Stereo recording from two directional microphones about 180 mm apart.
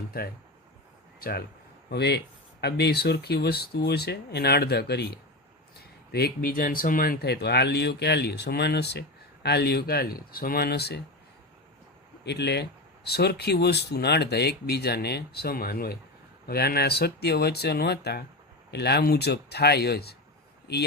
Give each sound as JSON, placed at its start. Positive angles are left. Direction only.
{"t": 0.1, "sound": "speech", "side_deg": 55}
{"t": 12.2, "sound": "speech", "side_deg": 70}